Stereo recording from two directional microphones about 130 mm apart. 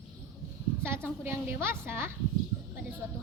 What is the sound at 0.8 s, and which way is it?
A child's voice, 20° right (ahead or behind).